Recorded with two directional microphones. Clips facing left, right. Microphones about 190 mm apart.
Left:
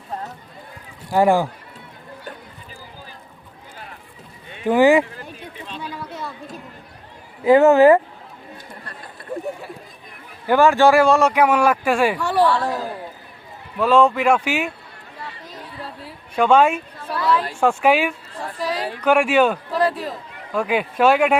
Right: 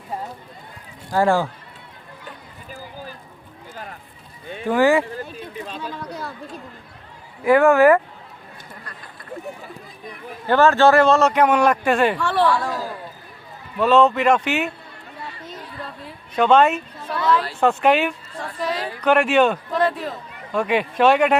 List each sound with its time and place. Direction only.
1.1 s speech: 15° left (ahead or behind)
4.6 s speech: 15° left (ahead or behind)
7.4 s speech: 20° left (ahead or behind)
10.4 s speech: 10° left (ahead or behind)
13.7 s speech: 10° left (ahead or behind)
15.8 s a sound: 5° left (ahead or behind)
17.4 s speech: 10° left (ahead or behind)